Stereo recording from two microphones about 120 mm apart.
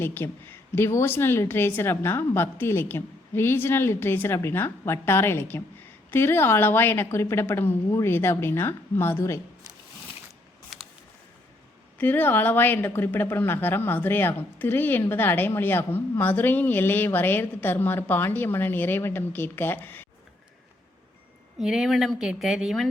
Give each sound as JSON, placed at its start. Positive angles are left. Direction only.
{"t": 0.0, "sound": "a woman's voice", "side_deg": 20}
{"t": 11.9, "sound": "speech", "side_deg": 15}
{"t": 21.6, "sound": "speech", "side_deg": -5}